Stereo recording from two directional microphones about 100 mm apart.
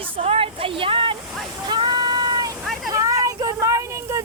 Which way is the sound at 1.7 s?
45° right (ahead or behind).